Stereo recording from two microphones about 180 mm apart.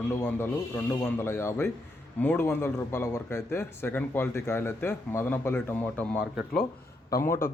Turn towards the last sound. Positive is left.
turn(degrees=15)  # may be behind; listen again after turning